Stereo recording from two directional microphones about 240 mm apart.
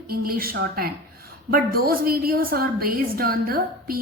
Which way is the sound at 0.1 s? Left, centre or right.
Right.